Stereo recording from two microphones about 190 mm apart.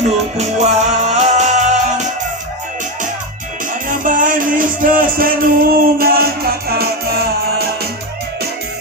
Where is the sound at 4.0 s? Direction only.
45° right (ahead or behind).